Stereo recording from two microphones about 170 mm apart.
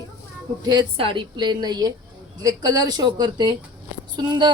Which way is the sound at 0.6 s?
25° right (ahead or behind).